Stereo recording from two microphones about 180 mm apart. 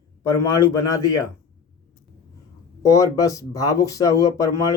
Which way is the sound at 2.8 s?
15° left (ahead or behind).